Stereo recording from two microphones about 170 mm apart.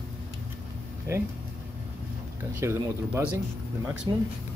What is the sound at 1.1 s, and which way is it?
Speech, 15° right (ahead or behind).